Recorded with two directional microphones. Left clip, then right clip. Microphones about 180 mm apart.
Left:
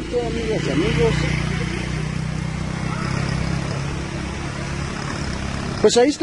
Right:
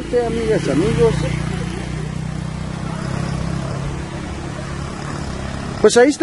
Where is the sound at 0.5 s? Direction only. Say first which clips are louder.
Right 3 dB; 60° right (ahead or behind).